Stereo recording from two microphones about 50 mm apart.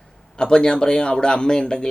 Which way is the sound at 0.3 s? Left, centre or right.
Centre.